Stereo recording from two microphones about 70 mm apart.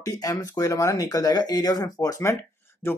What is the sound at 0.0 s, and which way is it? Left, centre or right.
Speech, left.